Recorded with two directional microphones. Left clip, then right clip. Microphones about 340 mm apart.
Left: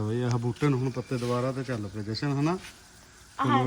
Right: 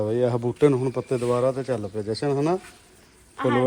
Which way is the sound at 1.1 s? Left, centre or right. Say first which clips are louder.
Right 7 dB; right.